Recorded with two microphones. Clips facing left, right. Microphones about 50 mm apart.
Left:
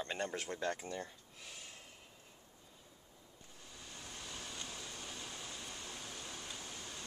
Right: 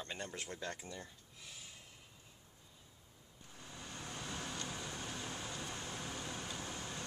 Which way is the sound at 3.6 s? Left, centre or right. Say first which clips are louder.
Right 4 dB; right.